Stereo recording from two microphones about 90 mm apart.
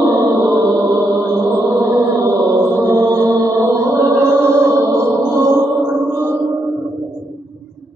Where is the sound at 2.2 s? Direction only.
30° right (ahead or behind).